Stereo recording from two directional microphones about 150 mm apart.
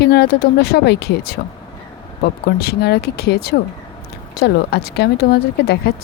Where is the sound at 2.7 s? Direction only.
90° left.